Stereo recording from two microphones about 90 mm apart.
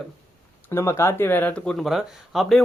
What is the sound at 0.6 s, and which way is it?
Speech, 30° left (ahead or behind).